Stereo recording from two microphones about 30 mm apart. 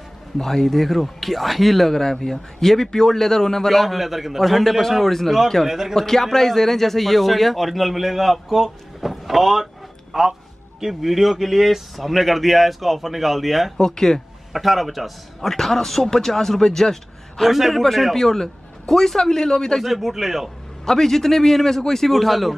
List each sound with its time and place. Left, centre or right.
0.4 s speech: centre
3.7 s speech: centre
5.7 s speech: centre
5.9 s speech: centre
10.1 s speech: right
10.8 s speech: centre
13.7 s speech: centre
14.5 s speech: centre
17.5 s speech: centre
18.1 s speech: centre
19.8 s speech: centre
20.8 s speech: centre
22.1 s speech: centre